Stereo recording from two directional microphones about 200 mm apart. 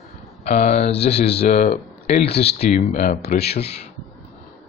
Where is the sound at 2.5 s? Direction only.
40° left (ahead or behind).